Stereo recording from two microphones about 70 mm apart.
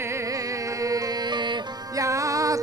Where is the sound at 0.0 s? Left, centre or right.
Right.